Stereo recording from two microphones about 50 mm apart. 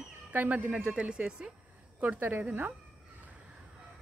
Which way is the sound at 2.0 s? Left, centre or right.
Right.